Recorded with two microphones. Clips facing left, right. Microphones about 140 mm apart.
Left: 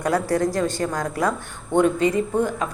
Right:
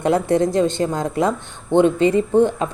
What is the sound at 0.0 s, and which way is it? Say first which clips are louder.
A woman's voice: right 4 dB; 25° right (ahead or behind).